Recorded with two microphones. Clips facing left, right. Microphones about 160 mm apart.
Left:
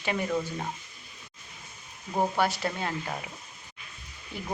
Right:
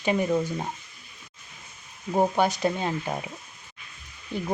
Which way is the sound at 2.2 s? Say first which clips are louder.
Right 4 dB; 20° right (ahead or behind).